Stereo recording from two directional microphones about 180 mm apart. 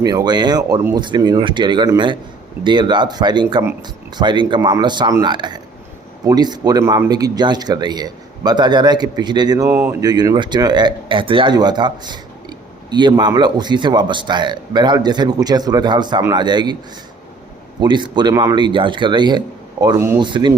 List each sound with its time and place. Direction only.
0.0 s speech: 20° right (ahead or behind)
17.7 s speech: 25° right (ahead or behind)